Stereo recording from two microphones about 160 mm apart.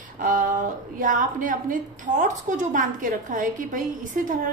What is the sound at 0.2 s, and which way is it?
A woman's voice, 55° right (ahead or behind).